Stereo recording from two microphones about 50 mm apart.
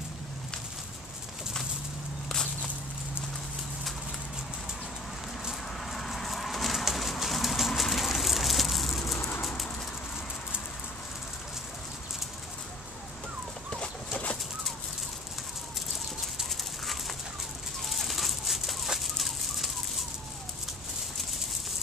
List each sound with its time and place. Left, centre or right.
5.9 s bird: centre
13.7 s fowl: left
16.4 s a sound: centre
17.8 s fowl: centre